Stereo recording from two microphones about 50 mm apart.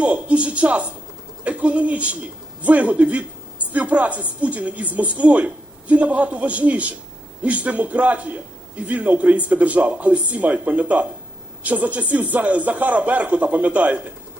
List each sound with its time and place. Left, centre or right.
0.0 s a man's voice: right